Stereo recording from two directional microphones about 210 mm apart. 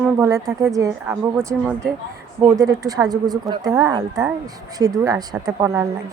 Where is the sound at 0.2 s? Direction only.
15° right (ahead or behind).